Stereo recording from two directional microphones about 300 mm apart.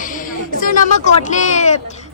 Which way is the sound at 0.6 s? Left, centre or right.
Left.